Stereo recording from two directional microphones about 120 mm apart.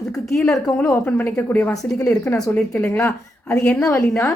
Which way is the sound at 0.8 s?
20° left (ahead or behind).